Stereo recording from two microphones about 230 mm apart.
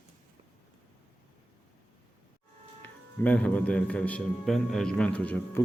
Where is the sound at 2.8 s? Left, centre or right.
Centre.